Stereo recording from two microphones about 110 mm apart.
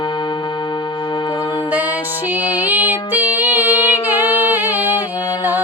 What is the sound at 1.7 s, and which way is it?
Music, 15° right (ahead or behind).